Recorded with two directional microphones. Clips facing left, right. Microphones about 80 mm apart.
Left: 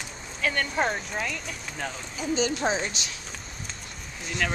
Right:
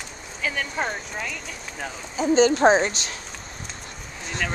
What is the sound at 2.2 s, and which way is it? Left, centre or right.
A woman's voice, right.